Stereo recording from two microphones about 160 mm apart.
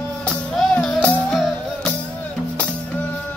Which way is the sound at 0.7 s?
Centre (ahead or behind).